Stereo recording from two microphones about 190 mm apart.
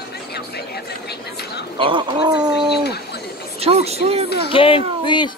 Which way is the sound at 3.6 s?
35° right (ahead or behind).